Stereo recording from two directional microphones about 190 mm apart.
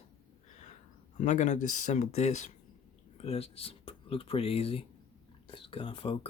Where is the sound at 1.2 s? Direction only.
40° left (ahead or behind).